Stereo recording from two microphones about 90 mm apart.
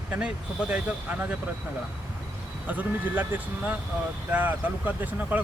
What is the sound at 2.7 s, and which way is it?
Speech, 20° right (ahead or behind).